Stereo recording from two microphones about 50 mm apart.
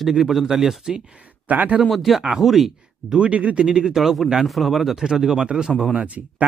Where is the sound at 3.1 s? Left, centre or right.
Right.